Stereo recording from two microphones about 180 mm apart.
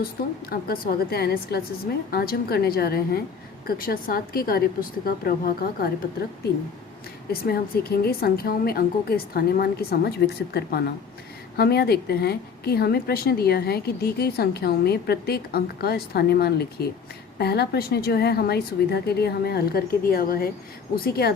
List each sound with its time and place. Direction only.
0.5 s a woman's voice: 55° left (ahead or behind)
7.3 s a woman's voice: 60° left (ahead or behind)